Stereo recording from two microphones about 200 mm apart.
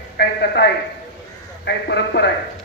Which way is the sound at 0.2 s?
55° left (ahead or behind).